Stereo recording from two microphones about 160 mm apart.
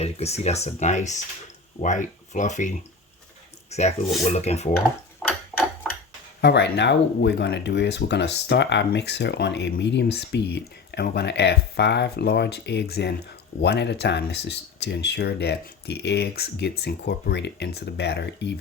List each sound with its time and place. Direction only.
0.0 s speech: 40° left (ahead or behind)
5.5 s a sound: centre (ahead or behind)
6.4 s speech: 90° left